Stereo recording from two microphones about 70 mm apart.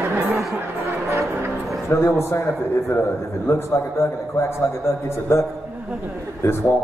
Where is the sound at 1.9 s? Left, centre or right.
Left.